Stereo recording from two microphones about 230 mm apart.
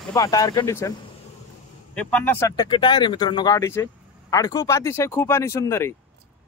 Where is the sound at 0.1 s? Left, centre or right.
Centre.